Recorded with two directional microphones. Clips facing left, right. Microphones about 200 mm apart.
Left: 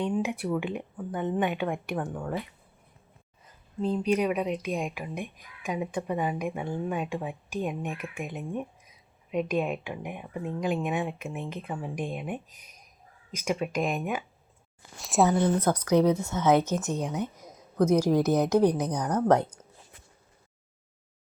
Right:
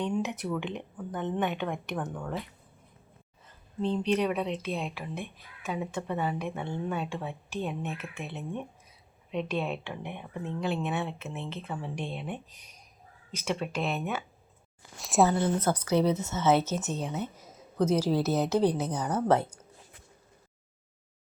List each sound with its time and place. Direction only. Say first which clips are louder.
0.0 s speech: left 2 dB; 10° left (ahead or behind)
3.4 s speech: left 1 dB; 5° left (ahead or behind)
12.5 s speech: even; 35° right (ahead or behind)
13.3 s speech: left 3 dB; 10° left (ahead or behind)
14.9 s speech: even; centre (ahead or behind)
15.5 s speech: left 3 dB; 10° left (ahead or behind)
17.2 s a sound: left 3 dB; 15° left (ahead or behind)
18.1 s speech: left 4 dB; 15° left (ahead or behind)
18.9 s a woman's voice: left 2 dB; 5° right (ahead or behind)
19.3 s speech: left 2 dB; 15° left (ahead or behind)